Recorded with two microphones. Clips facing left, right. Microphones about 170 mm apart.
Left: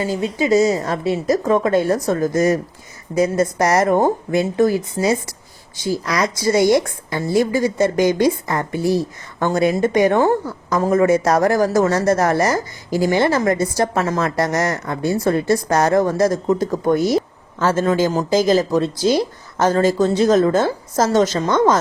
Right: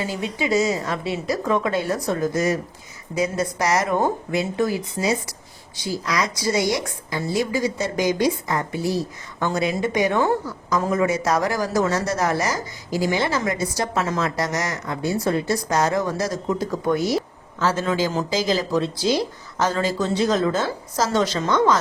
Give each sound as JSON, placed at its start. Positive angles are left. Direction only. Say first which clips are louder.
{"t": 0.0, "sound": "a woman's voice", "louder": "left 5 dB", "side_deg": 40}